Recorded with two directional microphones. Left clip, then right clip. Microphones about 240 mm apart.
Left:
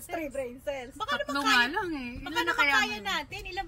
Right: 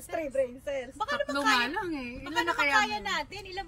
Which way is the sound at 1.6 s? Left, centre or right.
Centre.